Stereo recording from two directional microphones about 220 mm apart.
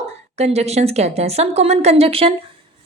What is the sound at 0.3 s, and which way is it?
A woman's voice, 30° right (ahead or behind).